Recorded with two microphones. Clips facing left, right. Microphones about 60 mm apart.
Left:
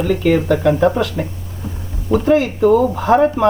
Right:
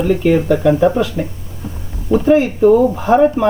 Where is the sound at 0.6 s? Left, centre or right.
Centre.